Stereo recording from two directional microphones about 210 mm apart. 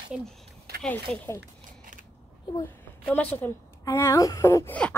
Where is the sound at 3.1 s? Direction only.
10° left (ahead or behind).